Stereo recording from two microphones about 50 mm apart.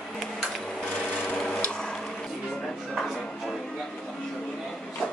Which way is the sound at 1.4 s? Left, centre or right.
Centre.